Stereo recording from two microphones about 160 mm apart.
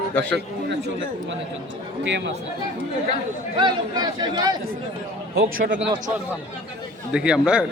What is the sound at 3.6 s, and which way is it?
Speech, 30° right (ahead or behind).